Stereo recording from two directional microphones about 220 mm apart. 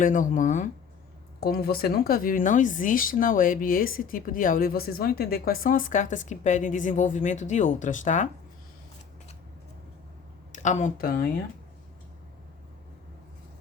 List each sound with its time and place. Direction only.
0.0 s speech: 35° left (ahead or behind)
10.5 s speech: 30° left (ahead or behind)